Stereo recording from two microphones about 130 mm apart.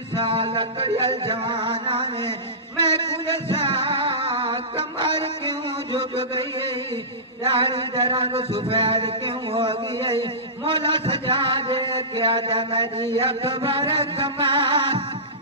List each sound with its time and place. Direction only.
0.2 s a man's voice: 45° right (ahead or behind)
3.4 s music: 45° right (ahead or behind)
5.0 s a sound: 40° right (ahead or behind)
7.5 s a man's voice: 45° right (ahead or behind)